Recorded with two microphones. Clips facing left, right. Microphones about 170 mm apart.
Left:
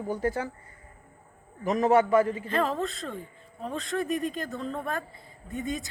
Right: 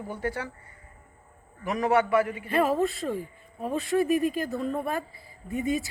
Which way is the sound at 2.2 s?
30° left (ahead or behind).